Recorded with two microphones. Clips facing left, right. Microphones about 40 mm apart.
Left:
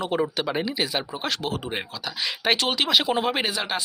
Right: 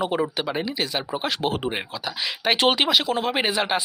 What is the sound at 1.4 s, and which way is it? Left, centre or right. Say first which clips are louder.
Speech: right 5 dB; right.